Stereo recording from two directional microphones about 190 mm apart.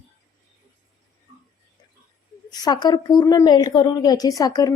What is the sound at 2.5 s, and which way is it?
Speech, 20° left (ahead or behind).